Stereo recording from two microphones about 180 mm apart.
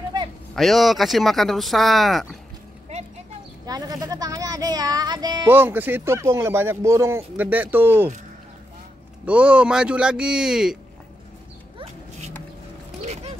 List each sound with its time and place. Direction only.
0.1 s a sound: 25° right (ahead or behind)
0.6 s speech: centre (ahead or behind)
3.6 s speech: 20° right (ahead or behind)
5.5 s speech: 10° right (ahead or behind)
9.2 s speech: 5° right (ahead or behind)
13.0 s dog: 35° right (ahead or behind)